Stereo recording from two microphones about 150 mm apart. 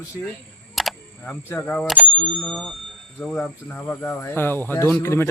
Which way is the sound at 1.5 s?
10° left (ahead or behind).